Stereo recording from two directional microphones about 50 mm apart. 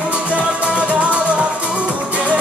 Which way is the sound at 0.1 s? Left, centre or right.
Right.